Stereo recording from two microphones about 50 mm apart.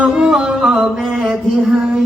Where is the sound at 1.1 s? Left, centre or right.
Centre.